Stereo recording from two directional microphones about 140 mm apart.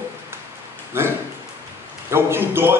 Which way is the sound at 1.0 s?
15° right (ahead or behind).